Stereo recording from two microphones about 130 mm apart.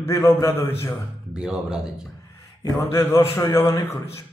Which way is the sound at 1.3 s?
5° right (ahead or behind).